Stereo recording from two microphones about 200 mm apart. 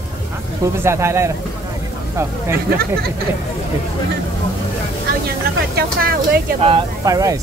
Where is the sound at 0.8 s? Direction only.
15° right (ahead or behind).